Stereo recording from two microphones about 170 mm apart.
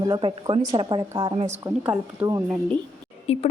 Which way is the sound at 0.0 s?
25° right (ahead or behind).